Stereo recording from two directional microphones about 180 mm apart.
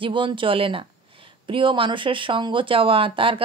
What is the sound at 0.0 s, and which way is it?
Speech, 25° right (ahead or behind).